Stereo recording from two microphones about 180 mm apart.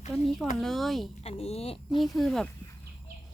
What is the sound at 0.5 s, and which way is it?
Speech, centre (ahead or behind).